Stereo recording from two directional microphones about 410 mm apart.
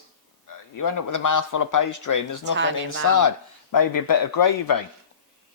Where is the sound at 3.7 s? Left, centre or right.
Left.